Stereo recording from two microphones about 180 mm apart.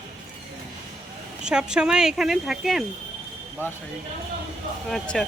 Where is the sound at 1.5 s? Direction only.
5° right (ahead or behind).